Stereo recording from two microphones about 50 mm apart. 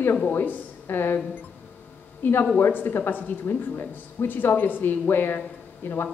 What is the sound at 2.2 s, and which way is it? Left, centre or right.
A woman's voice, left.